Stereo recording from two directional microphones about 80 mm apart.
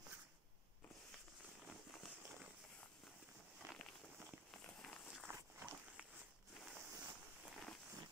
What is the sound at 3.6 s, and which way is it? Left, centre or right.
Walk, right.